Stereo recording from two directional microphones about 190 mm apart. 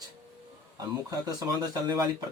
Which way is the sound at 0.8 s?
20° right (ahead or behind).